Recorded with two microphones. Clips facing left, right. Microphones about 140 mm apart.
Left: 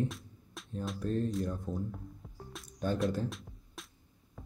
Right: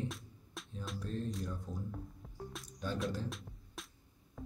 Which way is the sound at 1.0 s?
50° left (ahead or behind).